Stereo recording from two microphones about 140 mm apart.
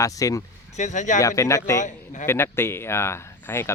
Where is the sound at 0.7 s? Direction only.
60° left (ahead or behind).